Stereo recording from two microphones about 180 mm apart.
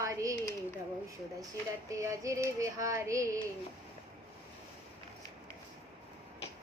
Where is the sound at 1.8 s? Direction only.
15° right (ahead or behind).